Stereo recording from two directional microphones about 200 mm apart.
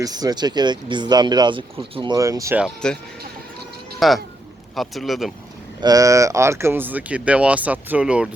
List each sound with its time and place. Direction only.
0.0 s speech: 20° right (ahead or behind)
2.6 s a man's voice: 5° left (ahead or behind)
4.0 s a man's voice: centre (ahead or behind)
5.8 s speech: 20° right (ahead or behind)